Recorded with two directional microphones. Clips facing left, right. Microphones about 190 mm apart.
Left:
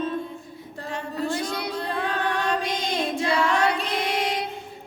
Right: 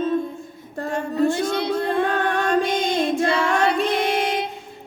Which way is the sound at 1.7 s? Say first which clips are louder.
Right 7 dB; 50° right (ahead or behind).